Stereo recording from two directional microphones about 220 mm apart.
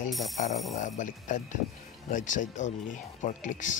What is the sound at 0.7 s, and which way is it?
Speech, 35° left (ahead or behind).